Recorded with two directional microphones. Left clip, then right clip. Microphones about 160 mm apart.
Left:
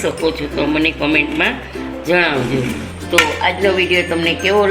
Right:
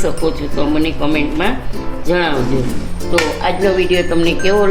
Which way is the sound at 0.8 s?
80° right.